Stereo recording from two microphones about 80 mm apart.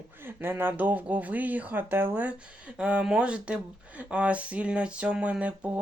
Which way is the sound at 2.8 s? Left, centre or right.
Centre.